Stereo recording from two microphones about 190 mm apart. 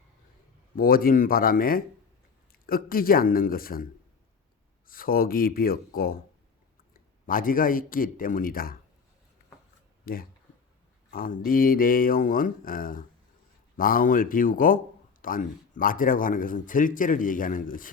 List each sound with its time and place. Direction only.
0.8 s a man's voice: 50° left (ahead or behind)
4.9 s a man's voice: 50° left (ahead or behind)
7.3 s a man's voice: 45° left (ahead or behind)
10.1 s a man's voice: 50° left (ahead or behind)